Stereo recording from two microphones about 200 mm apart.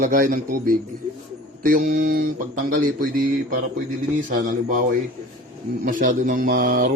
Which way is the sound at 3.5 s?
40° right (ahead or behind).